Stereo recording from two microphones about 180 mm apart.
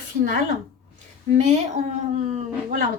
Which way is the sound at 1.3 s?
40° right (ahead or behind).